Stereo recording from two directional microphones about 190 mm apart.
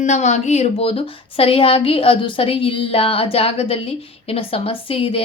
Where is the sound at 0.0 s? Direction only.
40° left (ahead or behind).